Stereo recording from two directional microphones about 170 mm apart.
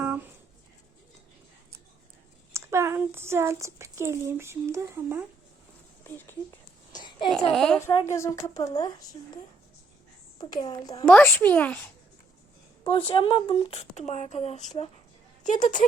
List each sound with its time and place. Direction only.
2.5 s speech: 15° right (ahead or behind)
7.5 s a woman's voice: 5° left (ahead or behind)
7.8 s a woman's voice: 15° left (ahead or behind)
10.3 s a woman's voice: 25° left (ahead or behind)
11.0 s a woman's voice: 5° left (ahead or behind)
12.8 s speech: 30° left (ahead or behind); by 15.8 s 50° left (ahead or behind)